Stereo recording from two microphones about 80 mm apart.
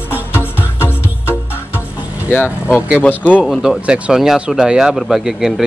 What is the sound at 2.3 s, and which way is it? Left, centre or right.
Speech, centre.